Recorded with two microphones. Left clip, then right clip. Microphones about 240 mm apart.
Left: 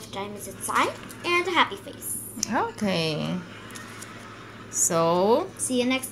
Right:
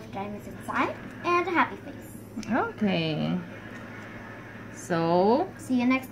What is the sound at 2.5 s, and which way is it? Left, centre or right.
Speech, centre.